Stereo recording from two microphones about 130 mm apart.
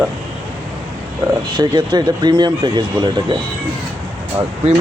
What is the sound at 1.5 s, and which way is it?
Speech, 35° right (ahead or behind).